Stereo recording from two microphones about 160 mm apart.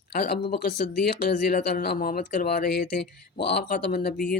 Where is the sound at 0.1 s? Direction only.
80° left.